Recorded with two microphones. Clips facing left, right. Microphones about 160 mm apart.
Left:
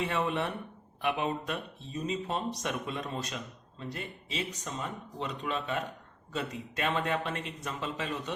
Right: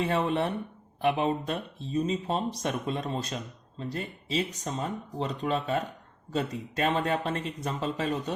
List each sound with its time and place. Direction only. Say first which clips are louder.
0.0 s speech: right 4 dB; 35° right (ahead or behind)